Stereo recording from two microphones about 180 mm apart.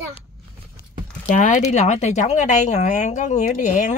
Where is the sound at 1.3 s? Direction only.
40° left (ahead or behind).